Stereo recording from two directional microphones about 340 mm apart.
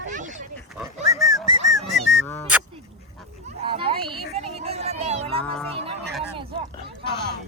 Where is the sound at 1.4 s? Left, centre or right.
Right.